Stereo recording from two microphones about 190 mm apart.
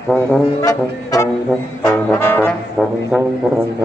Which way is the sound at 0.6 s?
20° left (ahead or behind).